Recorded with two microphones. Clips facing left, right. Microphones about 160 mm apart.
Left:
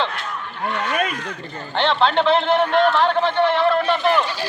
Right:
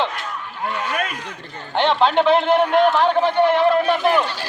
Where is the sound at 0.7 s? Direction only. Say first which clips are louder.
Left 2 dB; 5° right (ahead or behind).